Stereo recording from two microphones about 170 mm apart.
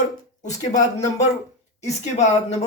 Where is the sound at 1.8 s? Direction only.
40° left (ahead or behind).